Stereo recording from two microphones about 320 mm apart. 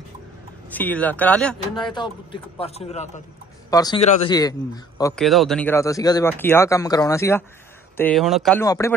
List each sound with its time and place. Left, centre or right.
0.7 s speech: centre
1.8 s speech: centre